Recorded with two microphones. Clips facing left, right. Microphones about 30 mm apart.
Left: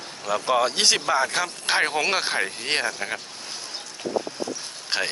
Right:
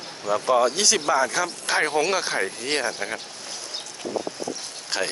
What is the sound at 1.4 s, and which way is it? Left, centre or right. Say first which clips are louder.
Speech: right 1 dB; left.